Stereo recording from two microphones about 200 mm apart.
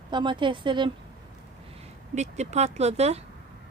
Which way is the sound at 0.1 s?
25° right (ahead or behind).